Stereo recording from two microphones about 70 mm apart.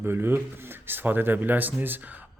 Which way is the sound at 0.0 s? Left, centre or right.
Right.